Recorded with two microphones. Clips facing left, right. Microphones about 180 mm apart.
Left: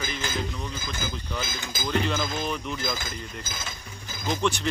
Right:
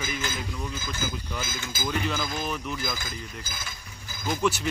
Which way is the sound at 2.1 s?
20° left (ahead or behind).